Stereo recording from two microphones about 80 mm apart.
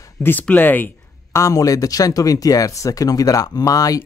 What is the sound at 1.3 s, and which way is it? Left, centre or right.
Speech, left.